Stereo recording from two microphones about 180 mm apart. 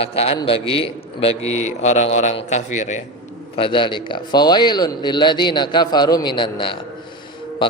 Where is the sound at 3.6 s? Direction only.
25° left (ahead or behind).